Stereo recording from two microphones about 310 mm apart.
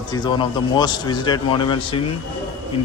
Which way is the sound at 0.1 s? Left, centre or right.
Centre.